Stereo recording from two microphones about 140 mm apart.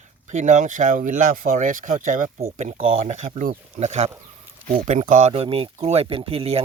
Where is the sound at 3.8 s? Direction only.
50° right (ahead or behind).